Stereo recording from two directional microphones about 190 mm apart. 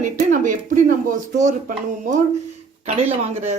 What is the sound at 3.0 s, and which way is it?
Speech, 35° right (ahead or behind).